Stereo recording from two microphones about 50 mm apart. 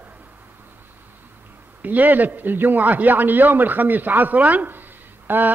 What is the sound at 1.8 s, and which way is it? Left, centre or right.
A man's voice, right.